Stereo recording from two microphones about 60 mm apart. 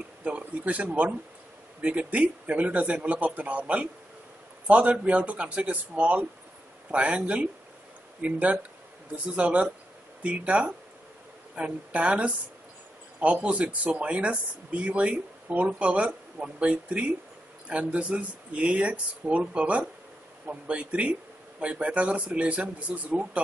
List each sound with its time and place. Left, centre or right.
0.2 s speech: right